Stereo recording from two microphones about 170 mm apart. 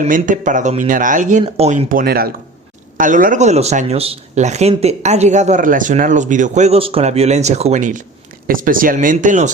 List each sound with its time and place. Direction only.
0.0 s speech: 50° right (ahead or behind)
1.9 s speech: 60° right (ahead or behind)